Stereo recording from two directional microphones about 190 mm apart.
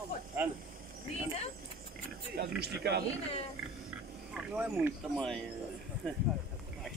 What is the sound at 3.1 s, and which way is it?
Speech, 30° left (ahead or behind).